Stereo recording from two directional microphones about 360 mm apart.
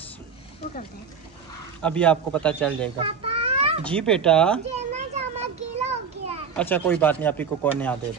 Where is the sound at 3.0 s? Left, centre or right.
Centre.